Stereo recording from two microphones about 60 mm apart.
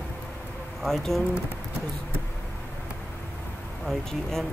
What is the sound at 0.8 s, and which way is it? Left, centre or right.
Speech, centre.